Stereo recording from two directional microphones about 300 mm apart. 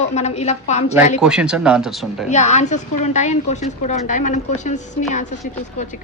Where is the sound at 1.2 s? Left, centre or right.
Centre.